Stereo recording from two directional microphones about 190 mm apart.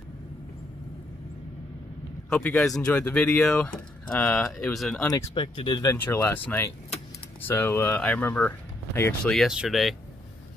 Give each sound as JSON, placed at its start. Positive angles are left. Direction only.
{"t": 2.2, "sound": "speech", "side_deg": 5}
{"t": 5.0, "sound": "speech", "side_deg": 15}
{"t": 5.3, "sound": "speech", "side_deg": 25}
{"t": 5.9, "sound": "speech", "side_deg": 10}
{"t": 9.3, "sound": "speech", "side_deg": 0}